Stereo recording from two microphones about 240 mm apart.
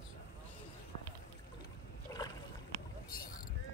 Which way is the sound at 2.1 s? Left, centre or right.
Centre.